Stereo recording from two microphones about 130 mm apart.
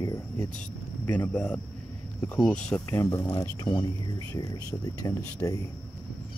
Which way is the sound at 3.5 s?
35° left (ahead or behind).